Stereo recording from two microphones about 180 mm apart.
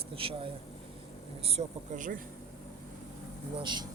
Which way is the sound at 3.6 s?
25° right (ahead or behind).